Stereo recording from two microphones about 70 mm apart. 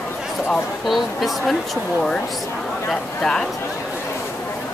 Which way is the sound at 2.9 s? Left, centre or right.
Centre.